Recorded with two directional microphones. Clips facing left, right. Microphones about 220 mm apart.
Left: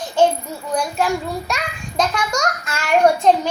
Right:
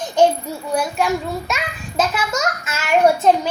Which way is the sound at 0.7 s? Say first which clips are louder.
Even; 5° right (ahead or behind).